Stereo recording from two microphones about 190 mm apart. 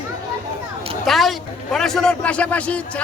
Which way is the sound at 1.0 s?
Centre (ahead or behind).